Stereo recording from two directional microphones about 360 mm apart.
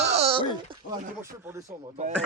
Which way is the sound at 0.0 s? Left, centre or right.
Centre.